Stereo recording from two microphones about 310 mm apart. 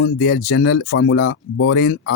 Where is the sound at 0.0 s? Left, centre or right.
Left.